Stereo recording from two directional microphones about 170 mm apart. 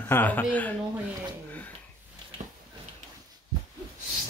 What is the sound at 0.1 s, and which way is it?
Speech, 10° left (ahead or behind).